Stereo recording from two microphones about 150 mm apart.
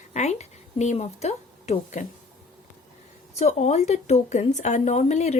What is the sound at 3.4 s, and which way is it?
Speech, 45° left (ahead or behind).